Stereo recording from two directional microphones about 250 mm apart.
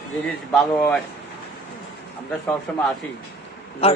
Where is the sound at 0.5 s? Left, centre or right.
Centre.